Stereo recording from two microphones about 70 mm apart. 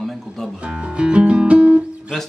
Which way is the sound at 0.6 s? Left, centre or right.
Centre.